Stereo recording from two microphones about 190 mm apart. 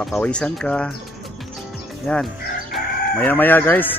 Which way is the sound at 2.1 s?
5° left (ahead or behind).